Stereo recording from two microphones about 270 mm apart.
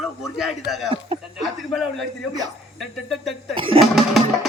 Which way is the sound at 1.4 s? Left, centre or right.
Centre.